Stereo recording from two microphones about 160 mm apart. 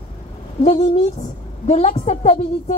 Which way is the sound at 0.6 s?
45° left (ahead or behind).